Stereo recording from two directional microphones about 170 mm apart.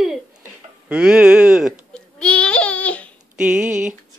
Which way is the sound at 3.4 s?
5° right (ahead or behind).